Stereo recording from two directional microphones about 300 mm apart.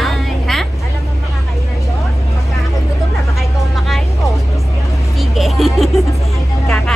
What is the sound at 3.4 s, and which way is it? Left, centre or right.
Vehicle, centre.